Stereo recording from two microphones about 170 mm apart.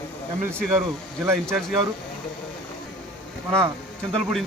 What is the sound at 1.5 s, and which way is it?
Speech, centre (ahead or behind).